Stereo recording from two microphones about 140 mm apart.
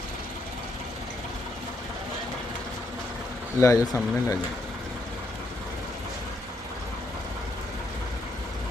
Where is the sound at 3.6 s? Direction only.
20° left (ahead or behind).